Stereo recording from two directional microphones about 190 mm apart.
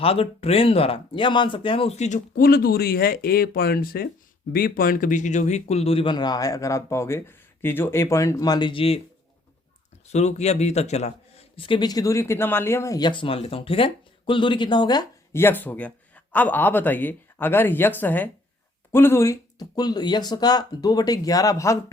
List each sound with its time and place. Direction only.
0.0 s speech: 30° left (ahead or behind)
10.1 s speech: 35° left (ahead or behind); by 21.9 s 15° left (ahead or behind)